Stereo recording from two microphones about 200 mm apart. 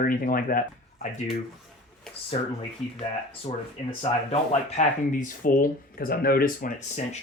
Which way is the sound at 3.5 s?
30° left (ahead or behind).